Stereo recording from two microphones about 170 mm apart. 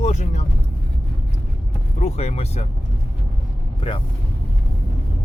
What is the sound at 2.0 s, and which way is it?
Speech, 40° left (ahead or behind).